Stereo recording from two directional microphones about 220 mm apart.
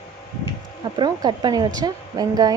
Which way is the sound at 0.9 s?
20° right (ahead or behind).